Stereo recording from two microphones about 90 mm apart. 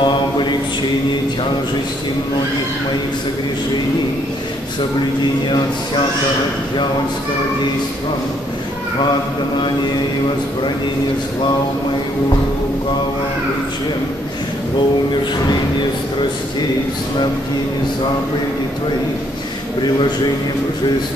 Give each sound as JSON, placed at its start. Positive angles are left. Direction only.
{"t": 0.0, "sound": "mantra", "side_deg": 55}